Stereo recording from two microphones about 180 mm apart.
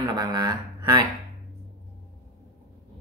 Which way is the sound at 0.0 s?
25° right (ahead or behind).